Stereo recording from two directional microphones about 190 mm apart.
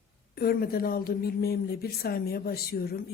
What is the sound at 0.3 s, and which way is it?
Speech, 55° left (ahead or behind).